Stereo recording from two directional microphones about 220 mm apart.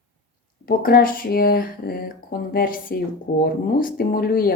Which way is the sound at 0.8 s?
40° left (ahead or behind).